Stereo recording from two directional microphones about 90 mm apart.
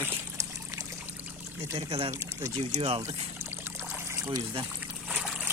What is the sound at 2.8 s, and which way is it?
Speech, 90° right.